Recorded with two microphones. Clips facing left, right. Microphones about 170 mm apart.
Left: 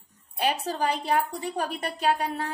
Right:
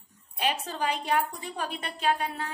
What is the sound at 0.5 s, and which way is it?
A woman's voice, 35° left (ahead or behind).